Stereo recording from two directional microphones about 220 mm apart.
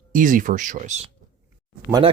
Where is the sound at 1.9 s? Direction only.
20° right (ahead or behind).